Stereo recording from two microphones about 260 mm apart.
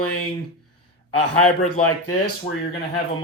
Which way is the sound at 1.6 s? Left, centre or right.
Left.